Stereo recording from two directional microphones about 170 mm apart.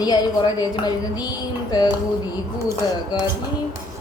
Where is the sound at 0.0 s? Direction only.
25° left (ahead or behind).